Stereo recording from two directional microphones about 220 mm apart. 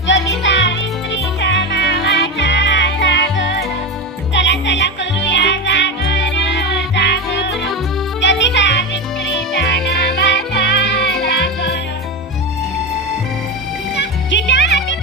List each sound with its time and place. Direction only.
0.0 s music: 55° left (ahead or behind)
13.9 s music: 55° left (ahead or behind)